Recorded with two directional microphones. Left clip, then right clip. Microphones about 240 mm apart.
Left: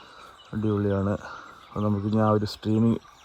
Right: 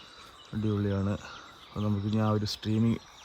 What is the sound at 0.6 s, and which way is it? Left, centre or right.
Speech, centre.